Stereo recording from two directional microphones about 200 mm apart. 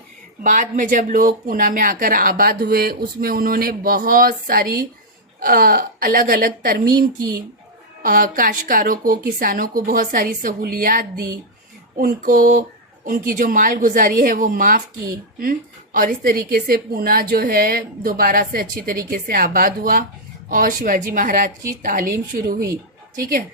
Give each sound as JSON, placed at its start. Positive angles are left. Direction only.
{"t": 0.4, "sound": "a woman's voice", "side_deg": -40}
{"t": 8.0, "sound": "a woman's voice", "side_deg": -45}